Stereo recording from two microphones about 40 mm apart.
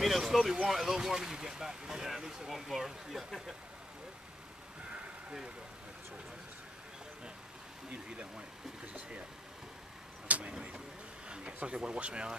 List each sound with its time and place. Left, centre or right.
0.0 s vehicle: centre
0.7 s speech: centre
7.9 s speech: right
10.2 s vehicle: right
11.2 s speech: right